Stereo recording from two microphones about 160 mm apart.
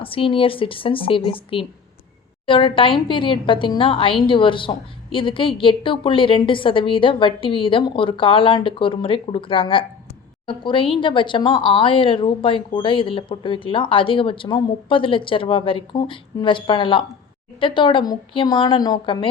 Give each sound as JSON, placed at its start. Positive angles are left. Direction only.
{"t": 0.0, "sound": "a woman's voice", "side_deg": 35}